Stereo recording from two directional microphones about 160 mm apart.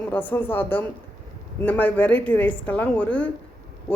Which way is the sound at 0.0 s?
10° left (ahead or behind).